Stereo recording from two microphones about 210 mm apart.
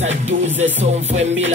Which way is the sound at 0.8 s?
30° right (ahead or behind).